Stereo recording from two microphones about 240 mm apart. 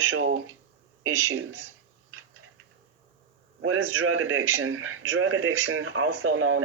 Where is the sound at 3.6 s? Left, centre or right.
Right.